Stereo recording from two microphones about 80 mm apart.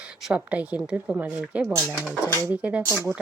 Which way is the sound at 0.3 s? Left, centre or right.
Centre.